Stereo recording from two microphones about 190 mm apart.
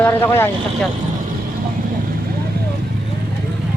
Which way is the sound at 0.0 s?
10° left (ahead or behind).